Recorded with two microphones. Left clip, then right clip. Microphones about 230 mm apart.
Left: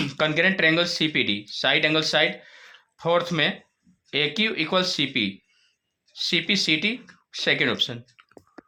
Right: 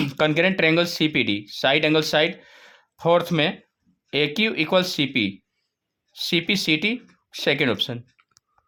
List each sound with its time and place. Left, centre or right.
0.0 s speech: right